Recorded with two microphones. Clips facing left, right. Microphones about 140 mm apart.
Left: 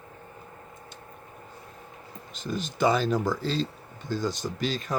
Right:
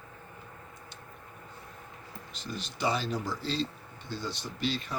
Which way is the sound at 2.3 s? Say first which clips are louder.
Left 8 dB; 45° left (ahead or behind).